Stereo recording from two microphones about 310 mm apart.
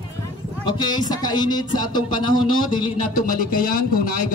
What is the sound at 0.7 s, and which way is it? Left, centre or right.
Speech, centre.